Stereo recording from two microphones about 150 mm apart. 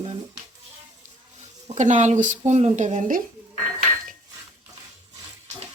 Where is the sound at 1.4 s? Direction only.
45° right (ahead or behind).